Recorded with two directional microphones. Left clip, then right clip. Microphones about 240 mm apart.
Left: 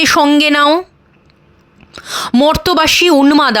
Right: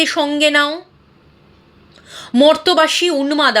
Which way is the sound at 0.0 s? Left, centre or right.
Left.